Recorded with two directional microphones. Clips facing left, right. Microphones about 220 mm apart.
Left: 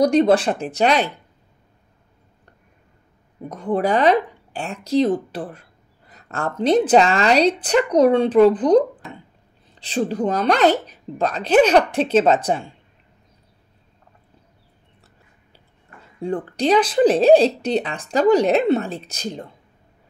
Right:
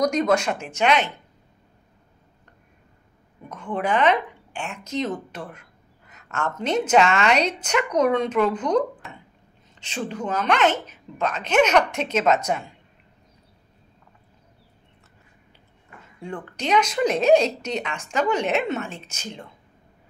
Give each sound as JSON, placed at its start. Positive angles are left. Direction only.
{"t": 0.0, "sound": "speech", "side_deg": 30}
{"t": 3.4, "sound": "speech", "side_deg": 35}
{"t": 16.2, "sound": "speech", "side_deg": 35}